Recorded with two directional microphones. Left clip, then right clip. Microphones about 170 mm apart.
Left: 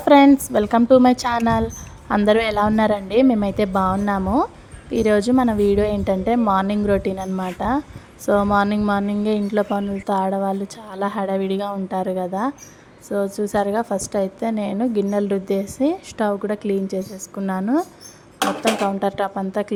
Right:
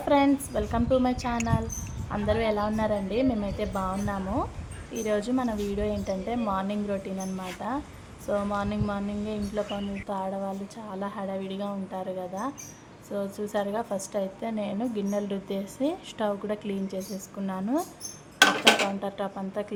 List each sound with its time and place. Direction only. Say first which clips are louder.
0.0 s a sound: left 11 dB; 45° left (ahead or behind)
0.5 s a woman's voice: left 11 dB; 45° left (ahead or behind)
18.9 s a woman's voice: left 11 dB; 45° left (ahead or behind)